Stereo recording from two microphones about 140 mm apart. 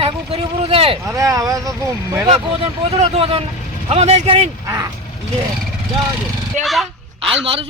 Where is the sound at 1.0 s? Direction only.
20° right (ahead or behind).